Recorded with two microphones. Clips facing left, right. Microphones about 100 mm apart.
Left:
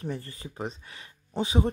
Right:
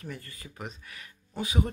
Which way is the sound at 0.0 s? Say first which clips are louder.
Left 6 dB; 30° left (ahead or behind).